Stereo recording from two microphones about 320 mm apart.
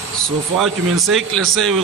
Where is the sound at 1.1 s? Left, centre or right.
Centre.